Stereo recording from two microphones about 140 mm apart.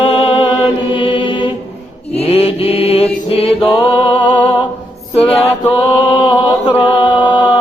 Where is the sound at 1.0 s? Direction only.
35° left (ahead or behind).